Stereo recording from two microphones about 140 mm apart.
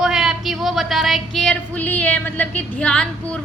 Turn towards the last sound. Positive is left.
turn(degrees=10)  # may be behind; listen again after turning